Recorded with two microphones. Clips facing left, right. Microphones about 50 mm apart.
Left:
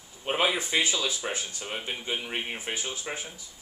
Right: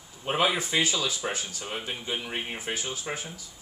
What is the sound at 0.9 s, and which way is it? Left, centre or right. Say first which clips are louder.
Speech: right 1 dB; centre.